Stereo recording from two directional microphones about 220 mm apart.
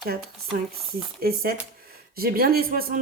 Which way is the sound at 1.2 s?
45° right (ahead or behind).